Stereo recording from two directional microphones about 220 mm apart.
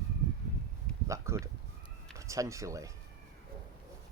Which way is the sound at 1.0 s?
15° right (ahead or behind).